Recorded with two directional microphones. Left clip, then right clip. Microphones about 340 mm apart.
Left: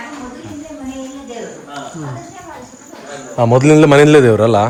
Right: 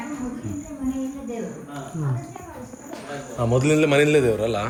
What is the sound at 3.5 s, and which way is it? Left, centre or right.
Speech, left.